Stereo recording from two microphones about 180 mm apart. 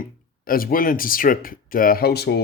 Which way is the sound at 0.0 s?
55° left (ahead or behind).